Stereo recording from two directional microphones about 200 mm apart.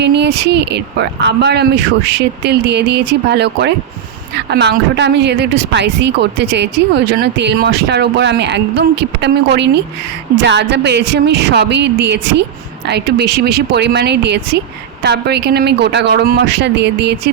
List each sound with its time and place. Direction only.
0.0 s speech: 55° right (ahead or behind)